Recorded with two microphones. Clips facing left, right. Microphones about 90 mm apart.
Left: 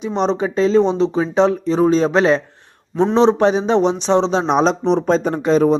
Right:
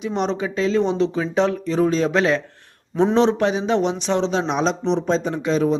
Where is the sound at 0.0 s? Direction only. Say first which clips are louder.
Left 4 dB; 30° left (ahead or behind).